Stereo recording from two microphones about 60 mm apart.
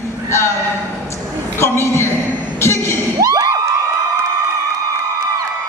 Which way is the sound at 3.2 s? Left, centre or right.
Right.